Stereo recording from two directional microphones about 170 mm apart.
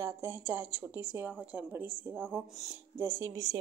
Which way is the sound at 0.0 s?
15° right (ahead or behind).